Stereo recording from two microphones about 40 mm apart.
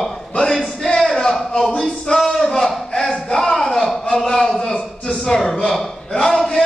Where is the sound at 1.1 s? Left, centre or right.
Centre.